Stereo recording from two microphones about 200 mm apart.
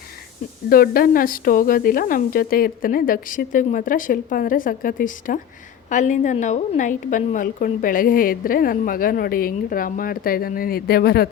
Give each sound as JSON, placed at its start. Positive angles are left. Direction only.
{"t": 0.7, "sound": "a woman's voice", "side_deg": 45}